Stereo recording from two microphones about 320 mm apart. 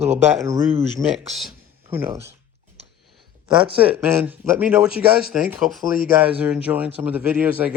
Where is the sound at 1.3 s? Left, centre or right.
Centre.